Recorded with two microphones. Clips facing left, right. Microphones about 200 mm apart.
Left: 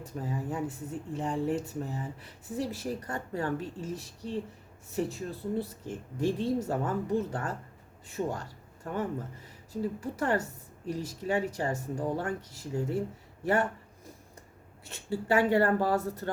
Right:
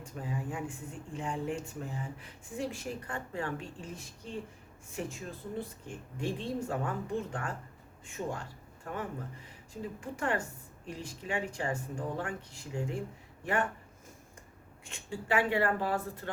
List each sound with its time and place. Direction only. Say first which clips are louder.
0.0 s speech: left 3 dB; 40° left (ahead or behind)
5.0 s a man's voice: left 6 dB; 35° left (ahead or behind)
14.8 s speech: left 5 dB; 40° left (ahead or behind)